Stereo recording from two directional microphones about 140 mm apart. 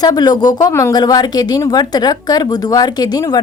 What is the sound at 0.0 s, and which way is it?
Speech, 30° left (ahead or behind).